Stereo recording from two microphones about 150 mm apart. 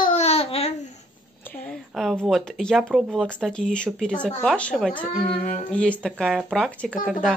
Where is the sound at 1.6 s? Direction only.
5° left (ahead or behind).